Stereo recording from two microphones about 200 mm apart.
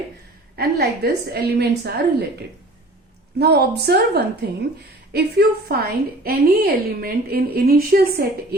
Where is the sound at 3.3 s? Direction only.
55° right (ahead or behind).